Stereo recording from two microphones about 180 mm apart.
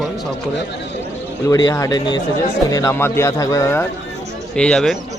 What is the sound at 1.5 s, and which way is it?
Speech, 20° left (ahead or behind).